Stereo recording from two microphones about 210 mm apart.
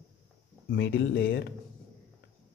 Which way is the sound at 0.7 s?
55° left (ahead or behind).